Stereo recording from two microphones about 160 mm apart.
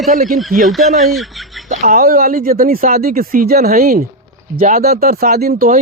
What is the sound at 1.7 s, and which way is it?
Speech, 55° right (ahead or behind).